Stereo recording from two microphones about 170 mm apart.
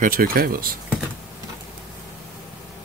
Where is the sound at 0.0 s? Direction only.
55° right (ahead or behind).